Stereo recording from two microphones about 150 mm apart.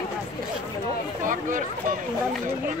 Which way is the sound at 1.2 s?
60° right (ahead or behind).